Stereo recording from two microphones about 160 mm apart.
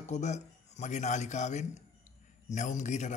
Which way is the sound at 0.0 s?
45° left (ahead or behind).